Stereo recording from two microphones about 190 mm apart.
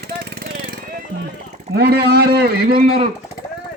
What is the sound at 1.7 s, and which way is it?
A man's voice, 60° right (ahead or behind).